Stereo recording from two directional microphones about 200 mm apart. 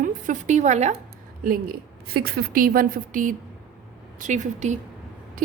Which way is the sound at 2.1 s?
50° right (ahead or behind).